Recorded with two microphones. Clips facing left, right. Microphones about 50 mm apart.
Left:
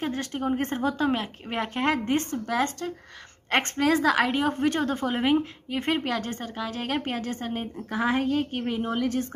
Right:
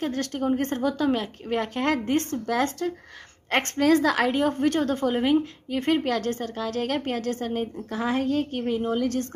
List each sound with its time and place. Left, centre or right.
0.0 s a woman's voice: centre
8.2 s a woman's voice: left